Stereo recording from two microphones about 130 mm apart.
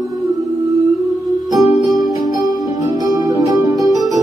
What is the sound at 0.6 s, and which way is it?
Music, 25° right (ahead or behind).